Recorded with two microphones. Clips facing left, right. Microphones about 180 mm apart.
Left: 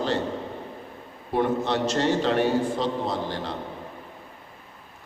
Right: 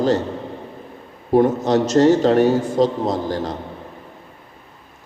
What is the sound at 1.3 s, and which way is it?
A man's voice, 40° right (ahead or behind).